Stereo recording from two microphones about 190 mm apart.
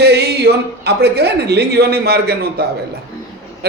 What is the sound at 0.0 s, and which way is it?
A man's voice, 60° right (ahead or behind).